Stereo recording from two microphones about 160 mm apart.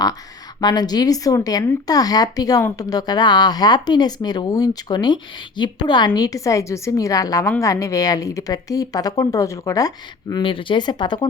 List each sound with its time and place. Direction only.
0.6 s speech: 25° left (ahead or behind)
10.4 s speech: 30° left (ahead or behind)